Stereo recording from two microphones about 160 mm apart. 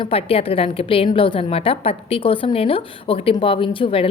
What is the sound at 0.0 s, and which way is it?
A woman's voice, 35° left (ahead or behind).